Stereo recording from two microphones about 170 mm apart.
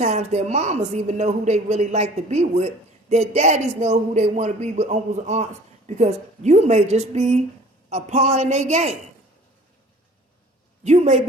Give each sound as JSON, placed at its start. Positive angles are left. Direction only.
{"t": 0.0, "sound": "a man's voice", "side_deg": -40}
{"t": 10.8, "sound": "a man's voice", "side_deg": -40}